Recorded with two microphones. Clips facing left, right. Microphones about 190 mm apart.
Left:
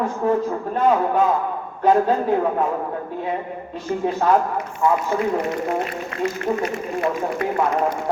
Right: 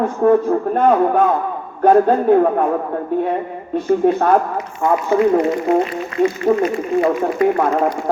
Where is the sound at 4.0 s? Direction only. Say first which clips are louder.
Right 1 dB; 55° right (ahead or behind).